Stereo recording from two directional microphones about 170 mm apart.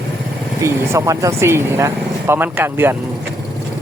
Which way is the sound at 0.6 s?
20° right (ahead or behind).